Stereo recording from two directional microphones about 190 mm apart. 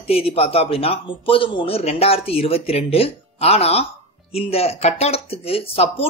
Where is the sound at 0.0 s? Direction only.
30° left (ahead or behind).